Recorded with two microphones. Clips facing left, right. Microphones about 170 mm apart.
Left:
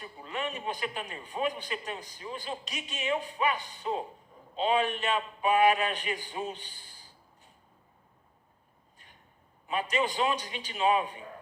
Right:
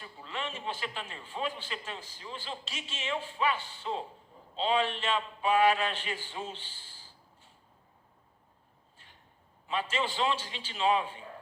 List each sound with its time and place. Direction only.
0.2 s speech: 15° left (ahead or behind)
4.6 s a man's voice: 55° left (ahead or behind)
4.9 s speech: 15° left (ahead or behind)
9.8 s speech: 15° left (ahead or behind)